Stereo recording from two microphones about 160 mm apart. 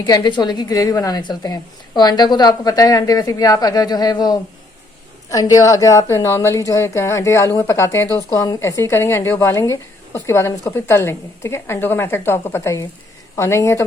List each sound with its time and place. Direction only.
0.0 s a woman's voice: 25° left (ahead or behind)